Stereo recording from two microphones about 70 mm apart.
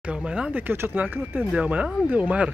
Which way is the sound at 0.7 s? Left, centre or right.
Right.